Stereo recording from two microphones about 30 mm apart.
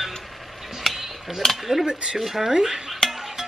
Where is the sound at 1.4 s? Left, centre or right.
Centre.